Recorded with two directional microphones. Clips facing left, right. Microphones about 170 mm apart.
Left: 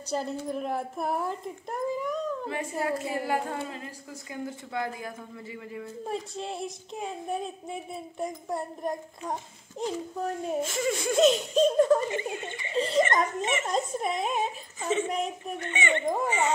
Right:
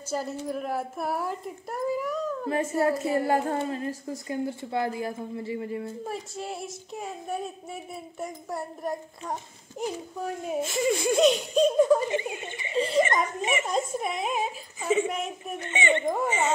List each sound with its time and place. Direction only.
0.1 s speech: 5° right (ahead or behind)
2.4 s a woman's voice: 40° right (ahead or behind)
6.0 s speech: 5° right (ahead or behind)
9.3 s speech: 5° right (ahead or behind)
12.1 s speech: 20° right (ahead or behind)
12.7 s speech: centre (ahead or behind)
15.6 s a child's voice: 20° right (ahead or behind)